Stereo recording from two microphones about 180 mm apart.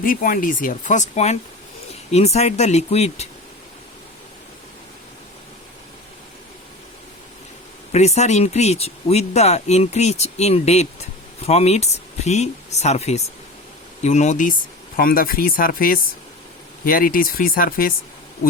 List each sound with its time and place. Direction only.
0.0 s speech: 50° left (ahead or behind)
7.9 s speech: 40° left (ahead or behind)
14.9 s speech: 55° left (ahead or behind)